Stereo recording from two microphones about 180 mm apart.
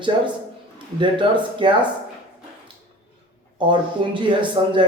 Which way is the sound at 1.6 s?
25° right (ahead or behind).